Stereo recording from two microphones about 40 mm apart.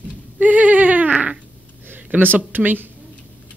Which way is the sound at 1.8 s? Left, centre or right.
Right.